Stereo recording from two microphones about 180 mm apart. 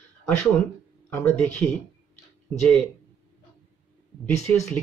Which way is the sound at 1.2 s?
5° left (ahead or behind).